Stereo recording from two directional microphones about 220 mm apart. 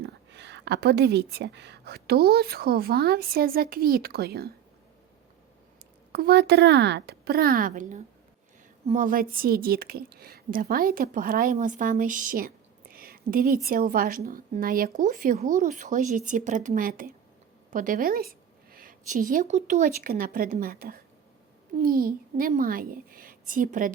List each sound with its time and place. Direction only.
0.0 s a woman's voice: 50° right (ahead or behind)
6.1 s a woman's voice: 45° right (ahead or behind)